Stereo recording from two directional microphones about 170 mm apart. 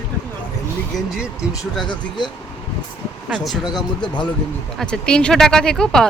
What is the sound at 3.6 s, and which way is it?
Speech, 25° left (ahead or behind).